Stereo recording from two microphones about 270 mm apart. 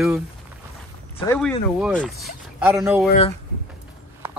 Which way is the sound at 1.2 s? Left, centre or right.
Centre.